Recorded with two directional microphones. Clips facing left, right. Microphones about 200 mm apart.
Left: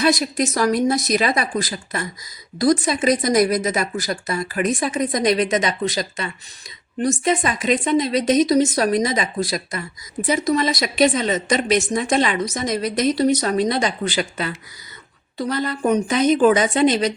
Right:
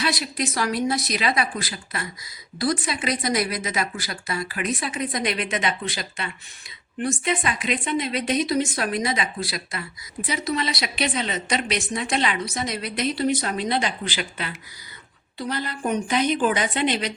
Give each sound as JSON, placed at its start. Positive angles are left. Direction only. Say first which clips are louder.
{"t": 0.0, "sound": "a woman's voice", "louder": "left 7 dB", "side_deg": 45}
{"t": 15.9, "sound": "a woman's voice", "louder": "left 5 dB", "side_deg": 40}